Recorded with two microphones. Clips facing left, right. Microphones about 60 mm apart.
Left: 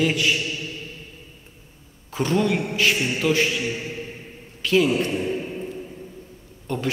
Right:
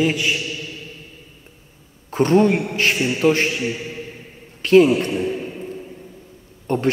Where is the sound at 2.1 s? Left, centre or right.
Right.